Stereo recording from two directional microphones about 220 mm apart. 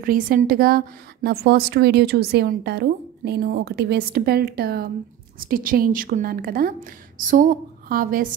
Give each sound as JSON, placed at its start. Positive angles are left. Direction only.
{"t": 0.0, "sound": "a woman's voice", "side_deg": -40}